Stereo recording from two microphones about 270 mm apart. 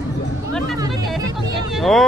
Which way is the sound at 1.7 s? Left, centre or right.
Centre.